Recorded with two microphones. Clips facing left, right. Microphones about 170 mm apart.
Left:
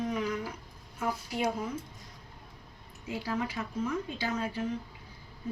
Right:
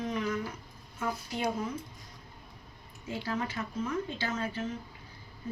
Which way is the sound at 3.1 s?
10° left (ahead or behind).